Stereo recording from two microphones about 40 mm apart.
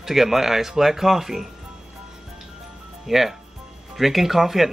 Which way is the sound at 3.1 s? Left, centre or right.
Centre.